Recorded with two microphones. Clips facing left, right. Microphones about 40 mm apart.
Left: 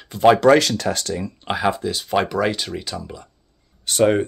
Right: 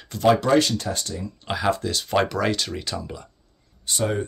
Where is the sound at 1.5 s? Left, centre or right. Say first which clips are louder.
Left 2 dB; centre.